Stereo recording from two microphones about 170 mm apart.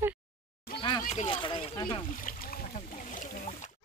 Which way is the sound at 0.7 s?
30° left (ahead or behind).